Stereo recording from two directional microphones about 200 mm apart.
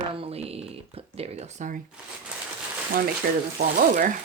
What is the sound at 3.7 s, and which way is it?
Speech, 40° right (ahead or behind).